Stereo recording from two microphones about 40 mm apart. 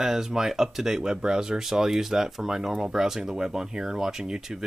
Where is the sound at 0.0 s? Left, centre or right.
Centre.